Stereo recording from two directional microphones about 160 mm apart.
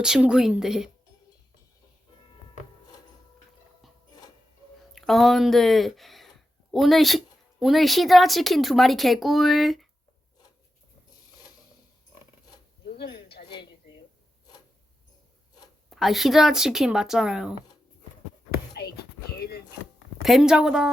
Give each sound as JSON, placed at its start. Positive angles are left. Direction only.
{"t": 0.0, "sound": "speech", "side_deg": -5}
{"t": 4.9, "sound": "speech", "side_deg": 0}
{"t": 13.4, "sound": "a sound", "side_deg": 50}
{"t": 15.9, "sound": "speech", "side_deg": 0}
{"t": 18.8, "sound": "whispering", "side_deg": 90}
{"t": 20.2, "sound": "speech", "side_deg": 0}